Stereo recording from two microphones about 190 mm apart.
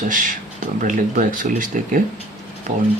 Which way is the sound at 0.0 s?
45° right (ahead or behind).